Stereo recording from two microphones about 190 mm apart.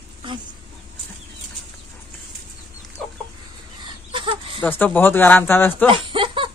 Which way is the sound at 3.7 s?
25° right (ahead or behind).